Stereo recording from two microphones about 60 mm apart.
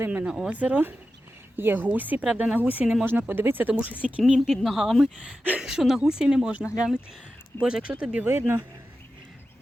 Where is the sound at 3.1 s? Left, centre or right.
Right.